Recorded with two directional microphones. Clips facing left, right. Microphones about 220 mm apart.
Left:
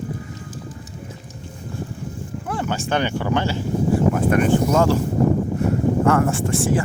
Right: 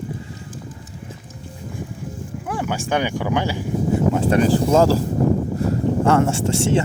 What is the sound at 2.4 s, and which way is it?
Speech, 10° right (ahead or behind).